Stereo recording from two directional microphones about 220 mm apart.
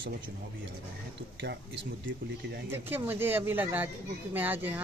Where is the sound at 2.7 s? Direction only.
10° right (ahead or behind).